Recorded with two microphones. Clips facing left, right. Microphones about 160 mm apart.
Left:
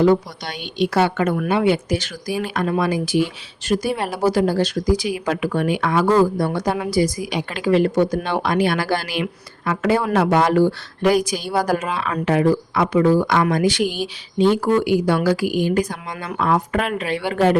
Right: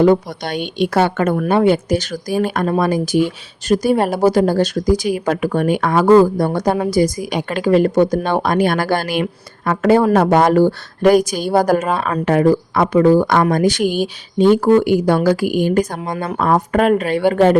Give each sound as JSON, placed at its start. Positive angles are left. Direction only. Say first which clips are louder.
{"t": 0.0, "sound": "speech", "louder": "right 3 dB", "side_deg": -50}